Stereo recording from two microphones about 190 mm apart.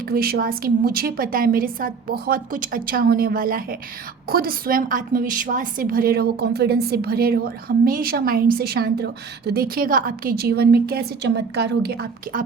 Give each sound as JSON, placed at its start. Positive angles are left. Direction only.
{"t": 0.1, "sound": "a woman's voice", "side_deg": -50}